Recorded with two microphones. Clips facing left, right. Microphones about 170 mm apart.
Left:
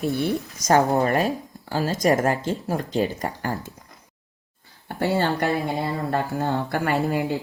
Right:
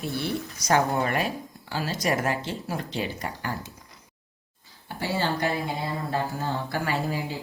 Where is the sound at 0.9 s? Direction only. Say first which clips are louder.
Left 5 dB; 35° left (ahead or behind).